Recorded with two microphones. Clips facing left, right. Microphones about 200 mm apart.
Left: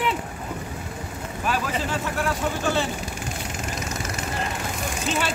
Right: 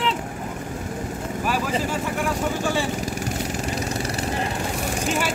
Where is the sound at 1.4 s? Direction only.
10° right (ahead or behind).